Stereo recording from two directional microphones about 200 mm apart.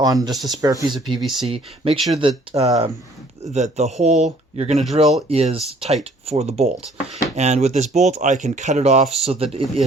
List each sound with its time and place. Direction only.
0.0 s speech: 20° right (ahead or behind)
0.3 s speech: centre (ahead or behind)
0.6 s speech: 15° right (ahead or behind)
1.2 s speech: centre (ahead or behind)
1.5 s speech: 30° right (ahead or behind)